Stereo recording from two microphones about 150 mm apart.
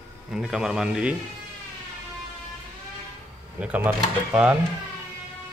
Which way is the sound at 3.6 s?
10° right (ahead or behind).